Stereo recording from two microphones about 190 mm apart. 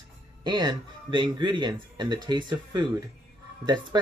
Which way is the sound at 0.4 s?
20° right (ahead or behind).